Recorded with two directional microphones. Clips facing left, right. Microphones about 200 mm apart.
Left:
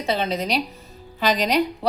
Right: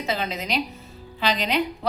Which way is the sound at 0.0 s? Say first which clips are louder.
Left 4 dB; 30° left (ahead or behind).